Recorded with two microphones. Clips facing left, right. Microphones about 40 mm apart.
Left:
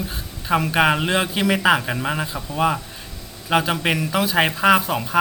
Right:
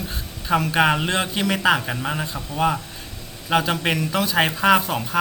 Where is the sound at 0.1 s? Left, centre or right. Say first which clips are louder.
Right 1 dB; centre.